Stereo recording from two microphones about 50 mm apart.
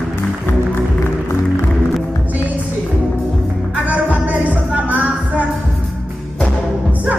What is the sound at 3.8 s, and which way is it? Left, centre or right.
Music, right.